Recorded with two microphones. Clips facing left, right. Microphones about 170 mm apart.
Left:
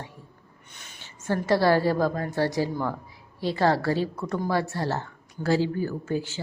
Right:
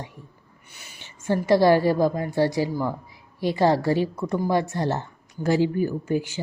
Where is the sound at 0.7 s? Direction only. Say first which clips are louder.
Right 1 dB; 10° right (ahead or behind).